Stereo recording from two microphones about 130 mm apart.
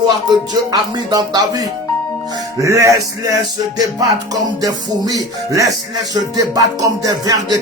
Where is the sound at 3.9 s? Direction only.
30° right (ahead or behind).